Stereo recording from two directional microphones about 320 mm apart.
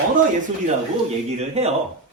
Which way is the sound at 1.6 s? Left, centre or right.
Centre.